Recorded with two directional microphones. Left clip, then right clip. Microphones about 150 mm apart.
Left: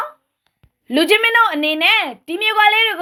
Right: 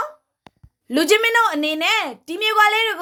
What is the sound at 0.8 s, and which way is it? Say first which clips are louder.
A woman's voice: left 2 dB; 15° left (ahead or behind).